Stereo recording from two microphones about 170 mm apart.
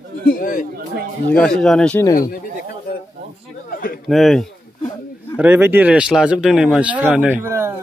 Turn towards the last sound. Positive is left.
turn(degrees=-10)  # may be behind; listen again after turning